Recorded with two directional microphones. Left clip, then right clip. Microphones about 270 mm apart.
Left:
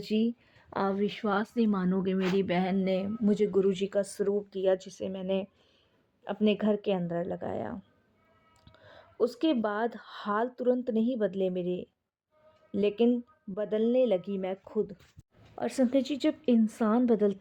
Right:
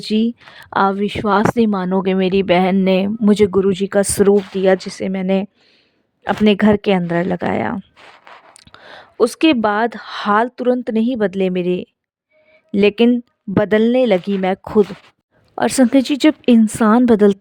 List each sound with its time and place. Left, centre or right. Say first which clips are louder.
0.0 s a woman's voice: right 11 dB; right